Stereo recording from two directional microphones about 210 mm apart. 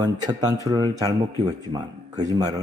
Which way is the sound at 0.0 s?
20° right (ahead or behind).